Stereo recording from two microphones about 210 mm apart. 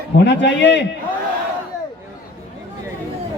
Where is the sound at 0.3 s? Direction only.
55° left (ahead or behind).